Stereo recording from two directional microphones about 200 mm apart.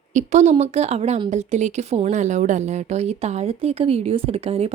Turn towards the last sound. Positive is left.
turn(degrees=-30)  # may be behind; listen again after turning